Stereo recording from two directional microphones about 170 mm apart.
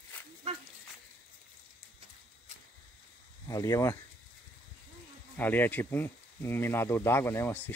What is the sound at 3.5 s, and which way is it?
Speech, 20° left (ahead or behind).